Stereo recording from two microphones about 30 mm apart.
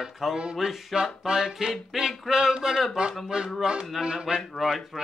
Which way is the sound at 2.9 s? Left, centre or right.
Right.